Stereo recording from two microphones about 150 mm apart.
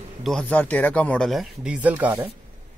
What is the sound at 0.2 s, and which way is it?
Speech, 5° left (ahead or behind).